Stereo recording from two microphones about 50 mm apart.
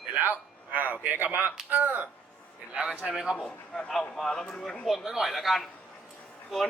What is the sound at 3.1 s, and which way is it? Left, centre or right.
Speech, centre.